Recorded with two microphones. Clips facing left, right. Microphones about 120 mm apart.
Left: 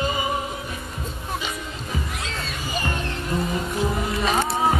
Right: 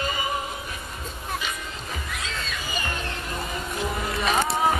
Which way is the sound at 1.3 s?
20° left (ahead or behind).